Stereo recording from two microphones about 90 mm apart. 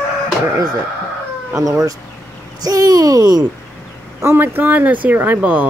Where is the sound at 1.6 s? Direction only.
40° right (ahead or behind).